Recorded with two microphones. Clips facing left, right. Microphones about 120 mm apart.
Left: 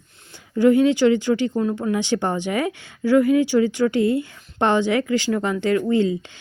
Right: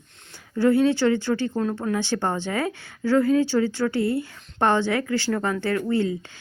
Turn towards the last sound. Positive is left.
turn(degrees=20)  # may be behind; listen again after turning